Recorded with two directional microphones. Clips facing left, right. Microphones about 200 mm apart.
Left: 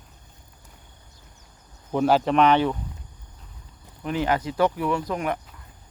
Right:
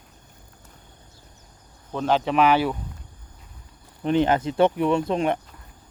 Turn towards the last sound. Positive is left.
turn(degrees=-25)  # may be behind; listen again after turning